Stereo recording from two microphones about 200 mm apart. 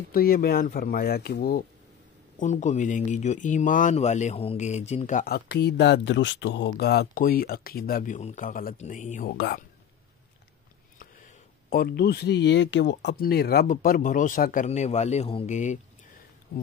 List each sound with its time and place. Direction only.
0.1 s speech: 45° left (ahead or behind)
2.3 s speech: 40° left (ahead or behind)
11.7 s speech: 50° left (ahead or behind)